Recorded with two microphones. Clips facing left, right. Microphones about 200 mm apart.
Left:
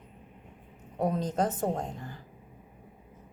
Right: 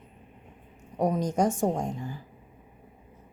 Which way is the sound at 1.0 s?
15° right (ahead or behind).